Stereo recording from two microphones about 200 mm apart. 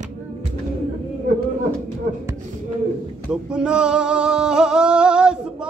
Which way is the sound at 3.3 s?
5° right (ahead or behind).